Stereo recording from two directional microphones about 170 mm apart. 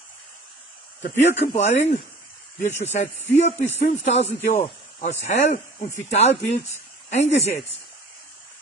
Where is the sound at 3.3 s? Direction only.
40° left (ahead or behind).